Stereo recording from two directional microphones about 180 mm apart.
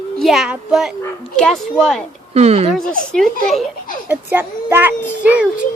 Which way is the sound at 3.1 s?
5° left (ahead or behind).